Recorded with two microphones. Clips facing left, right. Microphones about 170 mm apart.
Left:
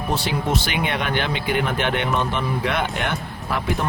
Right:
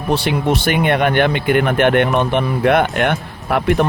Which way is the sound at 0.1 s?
65° right (ahead or behind).